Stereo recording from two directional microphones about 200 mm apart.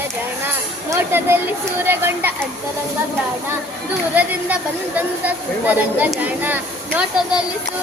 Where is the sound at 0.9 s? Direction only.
10° right (ahead or behind).